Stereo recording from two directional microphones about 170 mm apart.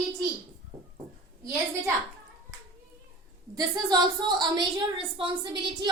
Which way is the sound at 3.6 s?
25° right (ahead or behind).